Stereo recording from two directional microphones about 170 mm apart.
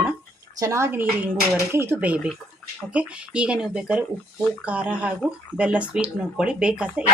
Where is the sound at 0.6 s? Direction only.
15° right (ahead or behind).